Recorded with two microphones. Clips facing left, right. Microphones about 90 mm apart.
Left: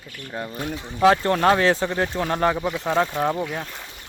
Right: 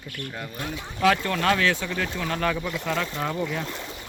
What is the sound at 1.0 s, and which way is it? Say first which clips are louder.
Speech: left 5 dB; 30° left (ahead or behind).